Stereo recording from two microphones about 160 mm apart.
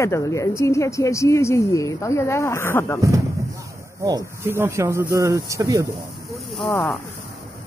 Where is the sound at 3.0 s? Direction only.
20° right (ahead or behind).